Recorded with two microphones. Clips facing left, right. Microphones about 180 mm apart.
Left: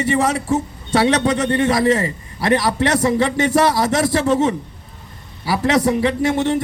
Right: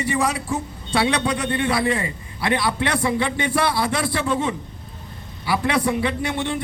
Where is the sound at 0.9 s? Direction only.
40° left (ahead or behind).